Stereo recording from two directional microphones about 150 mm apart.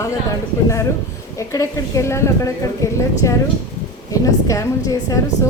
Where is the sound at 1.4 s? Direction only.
20° left (ahead or behind).